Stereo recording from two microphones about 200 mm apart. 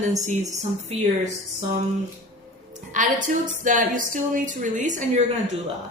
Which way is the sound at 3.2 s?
40° right (ahead or behind).